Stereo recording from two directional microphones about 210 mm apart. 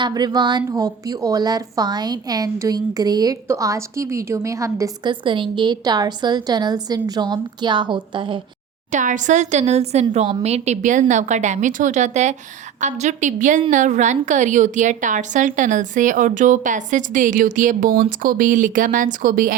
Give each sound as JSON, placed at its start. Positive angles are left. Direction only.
{"t": 0.0, "sound": "speech", "side_deg": -20}
{"t": 8.9, "sound": "a woman's voice", "side_deg": -35}